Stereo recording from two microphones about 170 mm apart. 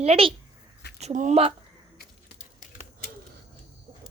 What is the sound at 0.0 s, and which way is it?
Speech, 35° right (ahead or behind).